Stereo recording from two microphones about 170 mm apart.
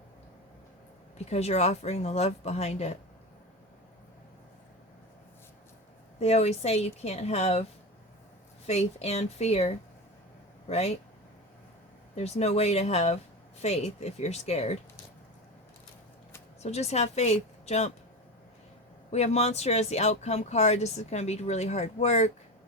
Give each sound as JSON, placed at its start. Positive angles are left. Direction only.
{"t": 1.2, "sound": "speech", "side_deg": 40}
{"t": 6.1, "sound": "speech", "side_deg": 40}
{"t": 8.6, "sound": "speech", "side_deg": 40}
{"t": 12.1, "sound": "speech", "side_deg": 40}
{"t": 16.6, "sound": "speech", "side_deg": 40}
{"t": 19.1, "sound": "speech", "side_deg": 40}